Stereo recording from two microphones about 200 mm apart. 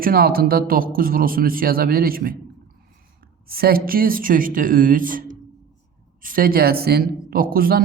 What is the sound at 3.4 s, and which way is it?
A man's voice, 50° right (ahead or behind).